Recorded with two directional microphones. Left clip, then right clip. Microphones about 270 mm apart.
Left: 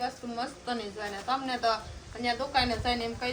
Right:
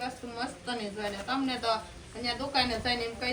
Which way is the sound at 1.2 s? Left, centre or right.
Centre.